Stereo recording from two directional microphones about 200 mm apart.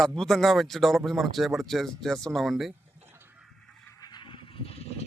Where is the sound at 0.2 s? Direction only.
Centre (ahead or behind).